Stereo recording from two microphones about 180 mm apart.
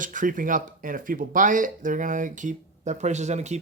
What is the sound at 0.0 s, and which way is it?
Speech, 45° right (ahead or behind).